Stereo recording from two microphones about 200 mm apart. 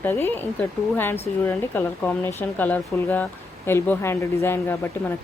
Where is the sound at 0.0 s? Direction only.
10° left (ahead or behind).